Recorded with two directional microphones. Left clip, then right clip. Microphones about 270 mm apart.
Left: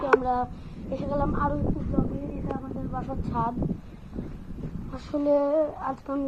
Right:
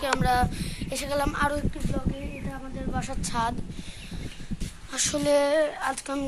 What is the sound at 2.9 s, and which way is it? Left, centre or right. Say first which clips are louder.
Speech: right 1 dB; right.